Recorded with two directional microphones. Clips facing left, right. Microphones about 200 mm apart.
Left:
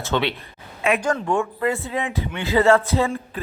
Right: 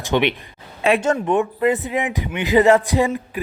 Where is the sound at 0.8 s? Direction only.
30° right (ahead or behind).